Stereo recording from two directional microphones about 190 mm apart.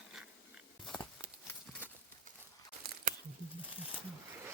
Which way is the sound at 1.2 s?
5° left (ahead or behind).